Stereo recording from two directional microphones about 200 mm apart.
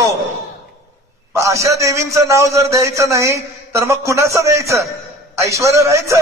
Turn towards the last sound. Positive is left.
turn(degrees=-15)  # may be behind; listen again after turning